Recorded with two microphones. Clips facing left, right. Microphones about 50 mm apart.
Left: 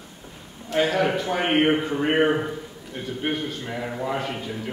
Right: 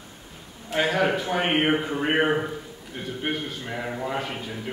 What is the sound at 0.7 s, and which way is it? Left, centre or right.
A man's voice, centre.